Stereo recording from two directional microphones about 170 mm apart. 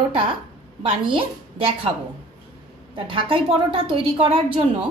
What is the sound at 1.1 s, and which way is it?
Speech, 30° right (ahead or behind).